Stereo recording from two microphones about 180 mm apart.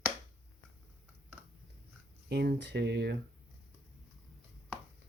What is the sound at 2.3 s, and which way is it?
Speech, 70° right (ahead or behind).